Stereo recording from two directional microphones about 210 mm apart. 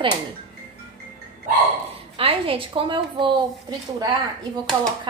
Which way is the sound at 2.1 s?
25° right (ahead or behind).